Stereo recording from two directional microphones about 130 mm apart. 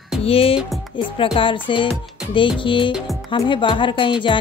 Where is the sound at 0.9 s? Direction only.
40° left (ahead or behind).